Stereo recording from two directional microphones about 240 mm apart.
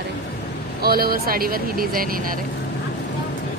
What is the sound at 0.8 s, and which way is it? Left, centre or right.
Speech, right.